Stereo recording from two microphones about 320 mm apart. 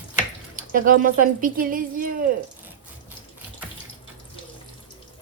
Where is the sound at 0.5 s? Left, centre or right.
Right.